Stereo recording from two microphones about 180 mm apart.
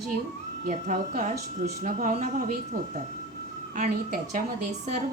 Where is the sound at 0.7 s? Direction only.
50° right (ahead or behind).